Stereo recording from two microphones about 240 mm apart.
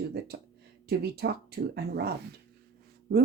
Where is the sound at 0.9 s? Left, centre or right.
Right.